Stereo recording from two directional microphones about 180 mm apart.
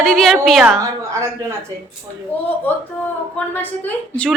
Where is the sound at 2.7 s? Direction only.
10° left (ahead or behind).